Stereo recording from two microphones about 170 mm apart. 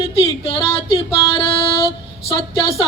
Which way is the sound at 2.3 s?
25° left (ahead or behind).